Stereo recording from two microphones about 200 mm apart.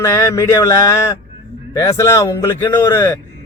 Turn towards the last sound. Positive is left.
turn(degrees=15)  # may be behind; listen again after turning